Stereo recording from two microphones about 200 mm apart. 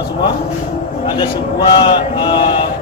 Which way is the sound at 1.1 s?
20° left (ahead or behind).